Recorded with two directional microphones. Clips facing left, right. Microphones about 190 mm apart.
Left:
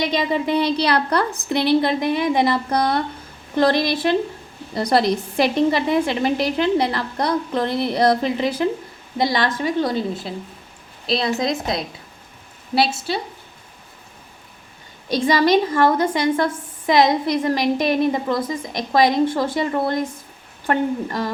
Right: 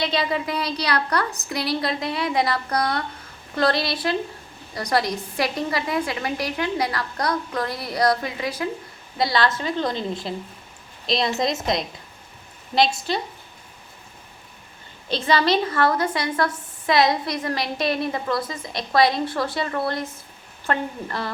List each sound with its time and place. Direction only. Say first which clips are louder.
0.0 s a woman's voice: left 3 dB; 20° left (ahead or behind)
15.1 s a woman's voice: left 4 dB; 15° left (ahead or behind)